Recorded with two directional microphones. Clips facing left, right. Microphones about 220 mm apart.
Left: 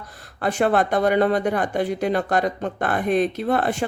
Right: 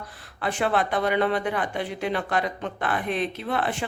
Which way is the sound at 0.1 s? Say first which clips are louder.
Left 5 dB; 45° left (ahead or behind).